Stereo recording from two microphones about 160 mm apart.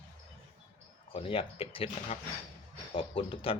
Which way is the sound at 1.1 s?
35° left (ahead or behind).